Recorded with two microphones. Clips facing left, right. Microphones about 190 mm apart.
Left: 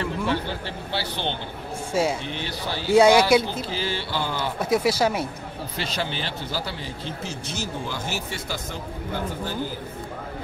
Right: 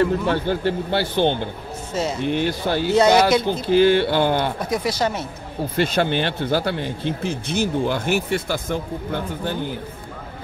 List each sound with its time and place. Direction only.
0.0 s speech: 50° right (ahead or behind)
2.9 s speech: 10° left (ahead or behind)
3.6 s speech: 60° right (ahead or behind)
4.6 s speech: 5° left (ahead or behind)
5.8 s speech: 55° right (ahead or behind)